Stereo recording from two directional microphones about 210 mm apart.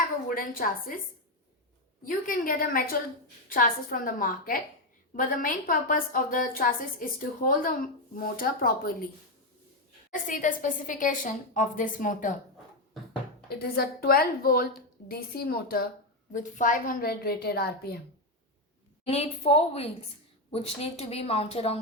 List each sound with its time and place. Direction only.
0.3 s a woman's voice: 40° left (ahead or behind)
2.0 s a woman's voice: 40° left (ahead or behind)
10.1 s a woman's voice: 35° left (ahead or behind)
13.5 s a woman's voice: 50° left (ahead or behind)
16.3 s a woman's voice: 35° left (ahead or behind)
19.0 s speech: 30° left (ahead or behind)